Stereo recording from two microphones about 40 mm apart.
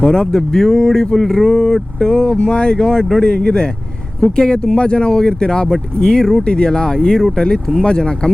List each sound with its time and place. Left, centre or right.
0.0 s speech: centre
2.0 s speech: centre